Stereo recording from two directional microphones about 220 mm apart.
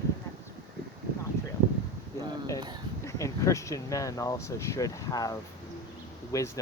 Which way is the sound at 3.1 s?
15° left (ahead or behind).